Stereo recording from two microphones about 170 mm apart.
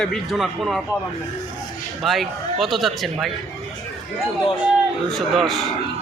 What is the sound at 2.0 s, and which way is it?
Speech, centre (ahead or behind).